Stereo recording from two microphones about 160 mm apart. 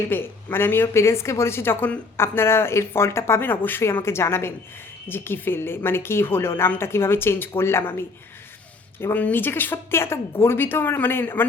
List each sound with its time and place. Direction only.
0.1 s a woman's voice: 15° left (ahead or behind)